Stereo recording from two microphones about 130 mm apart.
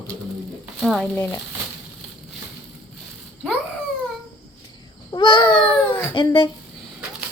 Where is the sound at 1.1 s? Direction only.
15° left (ahead or behind).